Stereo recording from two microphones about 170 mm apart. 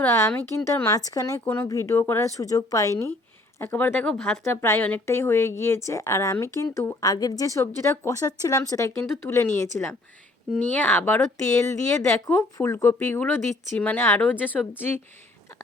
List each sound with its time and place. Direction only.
0.0 s speech: 15° left (ahead or behind)
4.4 s speech: 15° left (ahead or behind)